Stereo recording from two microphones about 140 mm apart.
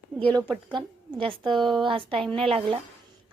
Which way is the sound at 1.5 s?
Centre (ahead or behind).